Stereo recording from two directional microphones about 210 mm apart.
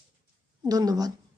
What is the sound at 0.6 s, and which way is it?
Speech, 20° right (ahead or behind).